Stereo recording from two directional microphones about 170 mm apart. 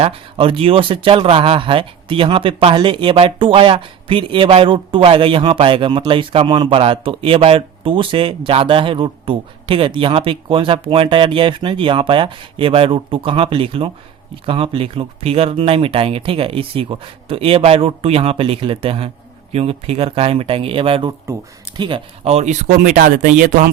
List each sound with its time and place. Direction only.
0.0 s speech: 35° right (ahead or behind); by 23.7 s 50° right (ahead or behind)